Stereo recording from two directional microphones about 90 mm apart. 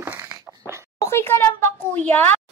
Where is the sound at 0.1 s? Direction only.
20° right (ahead or behind).